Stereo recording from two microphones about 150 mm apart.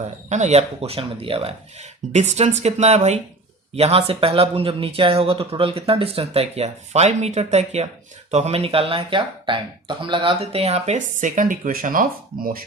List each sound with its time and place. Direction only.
0.3 s speech: 50° right (ahead or behind); by 12.5 s 70° right (ahead or behind)